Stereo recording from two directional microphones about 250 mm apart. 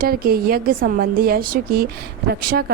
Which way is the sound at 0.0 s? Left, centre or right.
Right.